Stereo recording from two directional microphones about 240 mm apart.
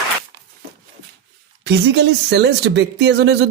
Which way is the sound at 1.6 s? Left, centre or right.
Right.